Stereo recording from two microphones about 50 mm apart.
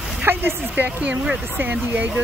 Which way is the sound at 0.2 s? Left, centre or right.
Right.